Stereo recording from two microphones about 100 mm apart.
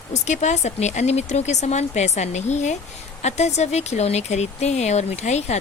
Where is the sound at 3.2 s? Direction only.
90° left.